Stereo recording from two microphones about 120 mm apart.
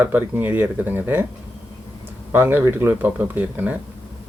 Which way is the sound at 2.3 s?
20° right (ahead or behind).